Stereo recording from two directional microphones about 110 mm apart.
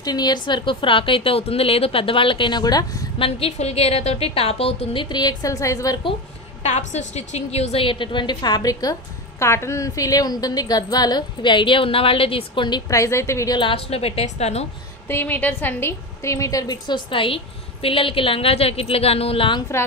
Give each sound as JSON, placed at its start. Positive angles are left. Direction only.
{"t": 0.0, "sound": "a woman's voice", "side_deg": 40}
{"t": 3.2, "sound": "a woman's voice", "side_deg": 60}
{"t": 5.1, "sound": "a woman's voice", "side_deg": 35}
{"t": 6.6, "sound": "a woman's voice", "side_deg": 90}
{"t": 9.4, "sound": "a woman's voice", "side_deg": 25}
{"t": 12.9, "sound": "a woman's voice", "side_deg": 25}
{"t": 13.6, "sound": "a woman's voice", "side_deg": 55}
{"t": 15.0, "sound": "a woman's voice", "side_deg": 20}